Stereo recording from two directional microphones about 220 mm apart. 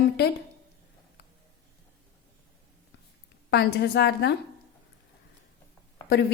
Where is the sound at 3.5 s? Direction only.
50° left (ahead or behind).